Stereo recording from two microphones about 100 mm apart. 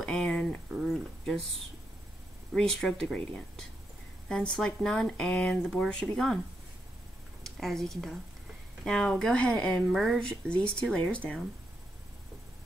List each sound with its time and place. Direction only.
0.0 s a sound: 5° left (ahead or behind)
2.5 s speech: 5° left (ahead or behind)
7.4 s speech: 5° left (ahead or behind)